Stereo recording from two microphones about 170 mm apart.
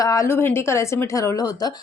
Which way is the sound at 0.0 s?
20° left (ahead or behind).